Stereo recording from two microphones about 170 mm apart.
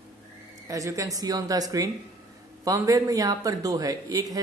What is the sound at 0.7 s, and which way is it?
A woman's voice, 20° right (ahead or behind).